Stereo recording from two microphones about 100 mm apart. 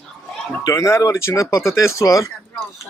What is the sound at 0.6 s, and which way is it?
Speech, 35° left (ahead or behind).